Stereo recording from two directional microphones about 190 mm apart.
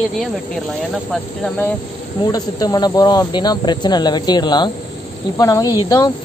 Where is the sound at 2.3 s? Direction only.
20° left (ahead or behind).